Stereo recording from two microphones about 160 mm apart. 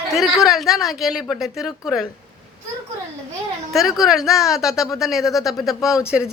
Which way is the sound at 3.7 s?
Centre (ahead or behind).